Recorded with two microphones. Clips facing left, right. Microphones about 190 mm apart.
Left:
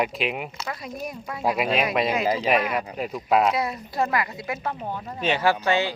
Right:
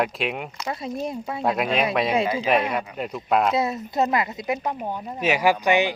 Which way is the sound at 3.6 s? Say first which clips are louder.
Right 3 dB; 25° right (ahead or behind).